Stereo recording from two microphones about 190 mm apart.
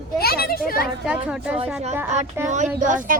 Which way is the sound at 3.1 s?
45° right (ahead or behind).